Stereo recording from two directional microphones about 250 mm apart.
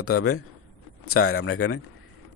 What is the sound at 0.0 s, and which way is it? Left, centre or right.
Speech, left.